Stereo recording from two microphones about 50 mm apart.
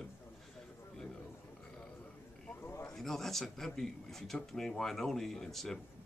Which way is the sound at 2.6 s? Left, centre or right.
Left.